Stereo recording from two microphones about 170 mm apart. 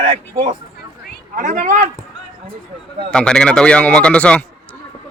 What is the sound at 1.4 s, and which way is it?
Speech, 50° right (ahead or behind).